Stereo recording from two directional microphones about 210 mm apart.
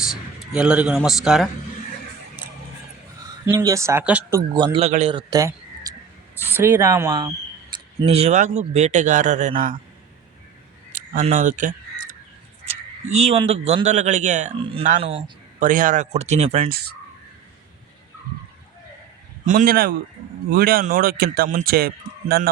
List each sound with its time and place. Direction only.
0.0 s a man's voice: 5° right (ahead or behind)
3.4 s speech: 15° right (ahead or behind); by 5.2 s 30° right (ahead or behind)
5.3 s a sound: 15° right (ahead or behind)
6.3 s speech: 10° right (ahead or behind)
8.0 s speech: 30° right (ahead or behind)
10.9 s caw: 35° right (ahead or behind)
12.6 s speech: 30° right (ahead or behind)
16.6 s a man's voice: 50° right (ahead or behind)
19.5 s a man's voice: 40° right (ahead or behind)